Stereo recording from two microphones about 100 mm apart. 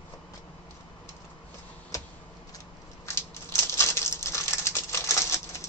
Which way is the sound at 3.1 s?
25° left (ahead or behind).